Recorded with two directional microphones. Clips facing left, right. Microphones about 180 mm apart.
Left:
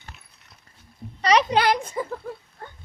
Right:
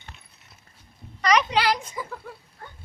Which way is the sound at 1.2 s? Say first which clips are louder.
Left 2 dB; 30° left (ahead or behind).